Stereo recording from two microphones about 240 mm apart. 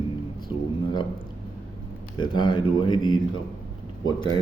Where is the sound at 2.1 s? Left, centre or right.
Centre.